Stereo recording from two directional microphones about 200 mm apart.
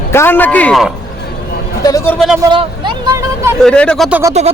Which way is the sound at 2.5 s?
25° right (ahead or behind).